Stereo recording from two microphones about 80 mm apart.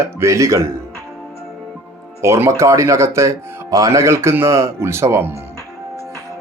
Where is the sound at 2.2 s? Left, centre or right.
Right.